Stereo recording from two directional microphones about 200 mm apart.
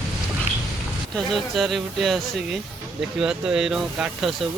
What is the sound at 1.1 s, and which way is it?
Speech, centre (ahead or behind).